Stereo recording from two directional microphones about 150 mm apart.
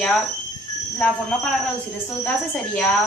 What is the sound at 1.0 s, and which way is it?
Speech, 5° left (ahead or behind).